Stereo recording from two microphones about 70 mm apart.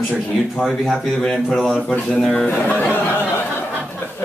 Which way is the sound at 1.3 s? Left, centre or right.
Centre.